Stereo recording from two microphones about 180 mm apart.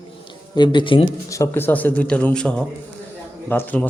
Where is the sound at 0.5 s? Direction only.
25° left (ahead or behind).